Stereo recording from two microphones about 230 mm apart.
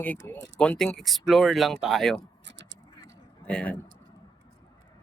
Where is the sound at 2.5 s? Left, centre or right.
Right.